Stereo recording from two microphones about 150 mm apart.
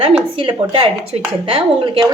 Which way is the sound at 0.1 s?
35° right (ahead or behind).